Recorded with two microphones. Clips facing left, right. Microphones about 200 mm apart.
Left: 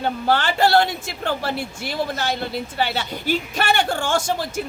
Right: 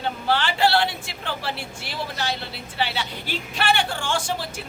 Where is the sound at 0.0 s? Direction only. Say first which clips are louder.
Left 4 dB; 45° left (ahead or behind).